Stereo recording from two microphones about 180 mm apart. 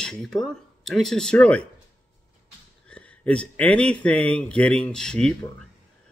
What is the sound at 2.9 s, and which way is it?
Speech, 5° left (ahead or behind).